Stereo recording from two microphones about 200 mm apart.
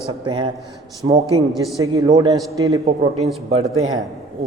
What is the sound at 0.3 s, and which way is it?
Speech, 25° right (ahead or behind).